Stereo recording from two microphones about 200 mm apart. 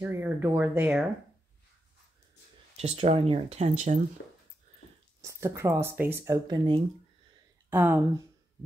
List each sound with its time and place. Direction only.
0.0 s speech: 10° right (ahead or behind)
2.8 s speech: 30° right (ahead or behind)
5.2 s speech: 15° right (ahead or behind)
7.7 s speech: 10° right (ahead or behind)